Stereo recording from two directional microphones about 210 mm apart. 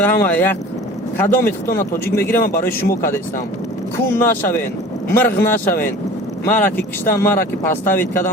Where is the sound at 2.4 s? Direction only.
45° left (ahead or behind).